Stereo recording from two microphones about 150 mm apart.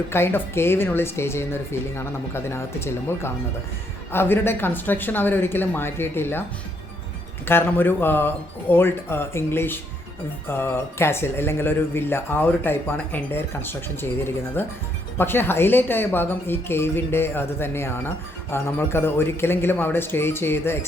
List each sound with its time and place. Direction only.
0.1 s speech: 15° left (ahead or behind)
7.4 s speech: 15° left (ahead or behind)